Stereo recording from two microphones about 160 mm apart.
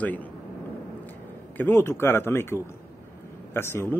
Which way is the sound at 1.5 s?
15° left (ahead or behind).